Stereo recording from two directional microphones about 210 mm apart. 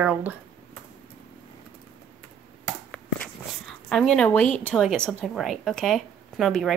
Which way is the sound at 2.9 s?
5° left (ahead or behind).